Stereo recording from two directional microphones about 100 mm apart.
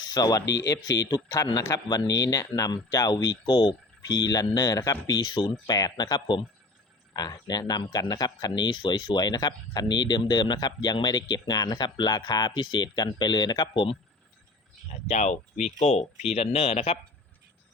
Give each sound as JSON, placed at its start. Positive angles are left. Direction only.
{"t": 0.1, "sound": "speech", "side_deg": 40}
{"t": 15.8, "sound": "speech", "side_deg": 90}